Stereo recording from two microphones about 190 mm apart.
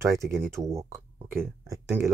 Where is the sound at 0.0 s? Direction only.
15° right (ahead or behind).